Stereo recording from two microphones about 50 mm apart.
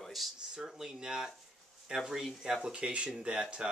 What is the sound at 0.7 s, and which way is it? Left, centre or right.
Speech, centre.